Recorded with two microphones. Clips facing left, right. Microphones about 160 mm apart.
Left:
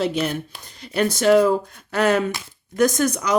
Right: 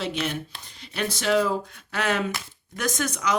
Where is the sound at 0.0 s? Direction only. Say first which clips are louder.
Left 6 dB; 40° left (ahead or behind).